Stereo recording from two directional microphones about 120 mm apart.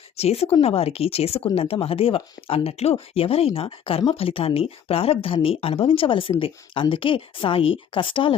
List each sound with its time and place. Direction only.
0.2 s speech: 55° left (ahead or behind)